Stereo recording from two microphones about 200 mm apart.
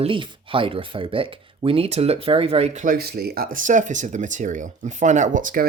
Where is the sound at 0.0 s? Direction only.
25° right (ahead or behind).